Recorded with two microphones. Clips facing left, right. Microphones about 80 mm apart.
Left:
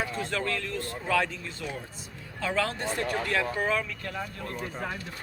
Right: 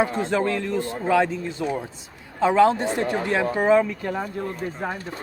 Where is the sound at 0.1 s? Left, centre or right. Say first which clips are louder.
Right 8 dB; right.